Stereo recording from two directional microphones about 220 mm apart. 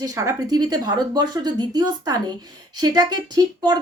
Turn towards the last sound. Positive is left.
turn(degrees=-20)  # may be behind; listen again after turning